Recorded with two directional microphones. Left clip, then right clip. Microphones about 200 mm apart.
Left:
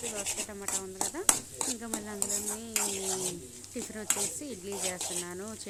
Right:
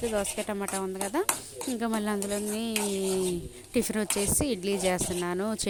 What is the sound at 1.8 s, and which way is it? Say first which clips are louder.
Speech: right 8 dB; 40° right (ahead or behind).